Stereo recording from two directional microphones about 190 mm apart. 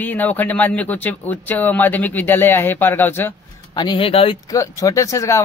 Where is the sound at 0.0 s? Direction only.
10° left (ahead or behind).